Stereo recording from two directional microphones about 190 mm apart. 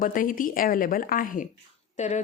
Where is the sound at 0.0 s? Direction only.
45° left (ahead or behind).